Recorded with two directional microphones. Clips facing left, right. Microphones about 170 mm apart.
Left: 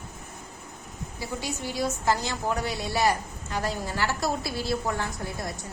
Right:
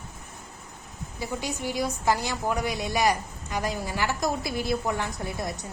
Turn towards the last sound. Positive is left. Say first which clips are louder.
# right 2 dB
turn(degrees=-20)  # may be behind; listen again after turning